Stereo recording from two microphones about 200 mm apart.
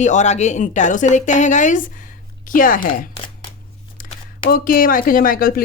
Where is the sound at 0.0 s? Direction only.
35° left (ahead or behind).